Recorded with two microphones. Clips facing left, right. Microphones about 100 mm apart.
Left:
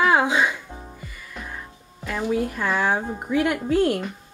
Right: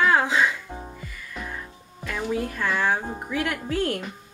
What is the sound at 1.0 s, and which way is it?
Music, 5° left (ahead or behind).